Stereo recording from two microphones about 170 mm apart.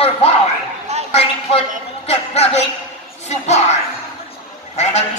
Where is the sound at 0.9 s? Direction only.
40° right (ahead or behind).